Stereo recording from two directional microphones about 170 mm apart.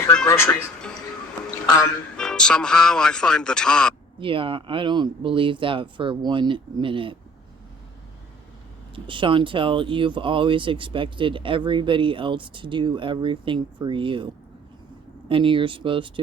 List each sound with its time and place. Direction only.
0.3 s speech: 15° left (ahead or behind)
2.1 s a man's voice: 5° left (ahead or behind)
4.2 s speech: 30° right (ahead or behind)
9.0 s speech: 30° right (ahead or behind)
15.3 s speech: 30° right (ahead or behind)